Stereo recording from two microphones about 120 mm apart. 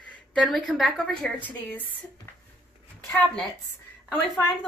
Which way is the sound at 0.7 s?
5° left (ahead or behind).